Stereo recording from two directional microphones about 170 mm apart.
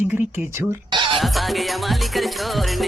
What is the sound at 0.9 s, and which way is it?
Music, 30° right (ahead or behind).